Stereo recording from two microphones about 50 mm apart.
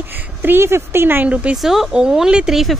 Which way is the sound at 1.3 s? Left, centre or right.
Right.